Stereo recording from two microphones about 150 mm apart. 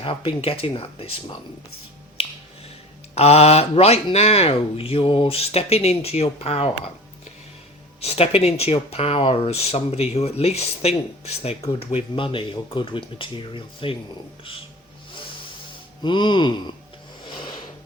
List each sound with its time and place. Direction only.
0.0 s speech: 35° left (ahead or behind)
3.2 s speech: 45° left (ahead or behind)
8.0 s speech: 40° left (ahead or behind)
16.0 s speech: 30° left (ahead or behind)